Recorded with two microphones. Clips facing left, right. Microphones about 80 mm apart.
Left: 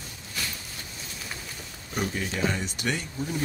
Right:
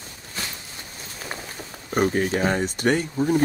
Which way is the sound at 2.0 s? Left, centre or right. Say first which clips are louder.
Right 8 dB; right.